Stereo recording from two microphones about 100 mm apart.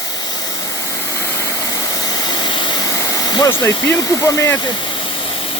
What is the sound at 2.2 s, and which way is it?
Vehicle, 55° left (ahead or behind).